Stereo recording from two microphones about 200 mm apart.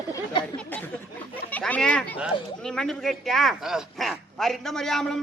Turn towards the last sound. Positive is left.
turn(degrees=0)  # may be behind; listen again after turning